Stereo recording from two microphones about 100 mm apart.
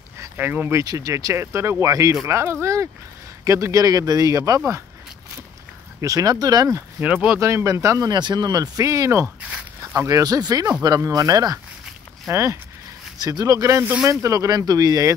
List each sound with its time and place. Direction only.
0.2 s speech: 20° right (ahead or behind)
0.7 s speech: 35° right (ahead or behind)
5.9 s speech: 35° right (ahead or behind)
7.0 s speech: 15° right (ahead or behind)
7.3 s speech: 30° right (ahead or behind)
8.1 s speech: 45° right (ahead or behind); by 12.5 s 30° right (ahead or behind)
13.2 s speech: 40° right (ahead or behind)